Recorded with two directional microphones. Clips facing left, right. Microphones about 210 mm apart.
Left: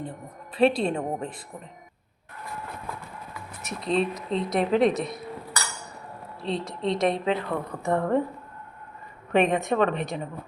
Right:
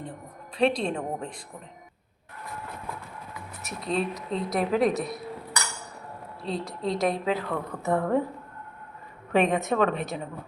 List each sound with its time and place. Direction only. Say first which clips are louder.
0.0 s speech: left 3 dB; 5° left (ahead or behind)
3.6 s speech: left 3 dB; centre (ahead or behind)
6.5 s speech: left 2 dB; centre (ahead or behind)
9.3 s speech: left 1 dB; centre (ahead or behind)